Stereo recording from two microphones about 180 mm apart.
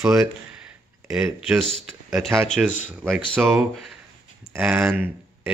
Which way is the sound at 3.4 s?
10° right (ahead or behind).